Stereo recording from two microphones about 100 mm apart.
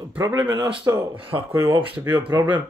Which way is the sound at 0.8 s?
25° right (ahead or behind).